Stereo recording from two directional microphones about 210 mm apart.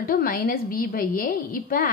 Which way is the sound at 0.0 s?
45° left (ahead or behind).